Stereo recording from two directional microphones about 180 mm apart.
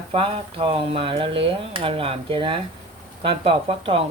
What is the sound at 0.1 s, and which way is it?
Speech, 30° right (ahead or behind).